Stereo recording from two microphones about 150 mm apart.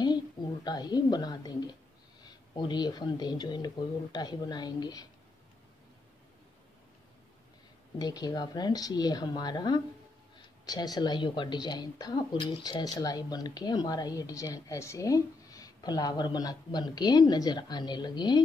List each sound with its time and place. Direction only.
0.0 s a woman's voice: 30° left (ahead or behind)
8.0 s a woman's voice: 25° left (ahead or behind)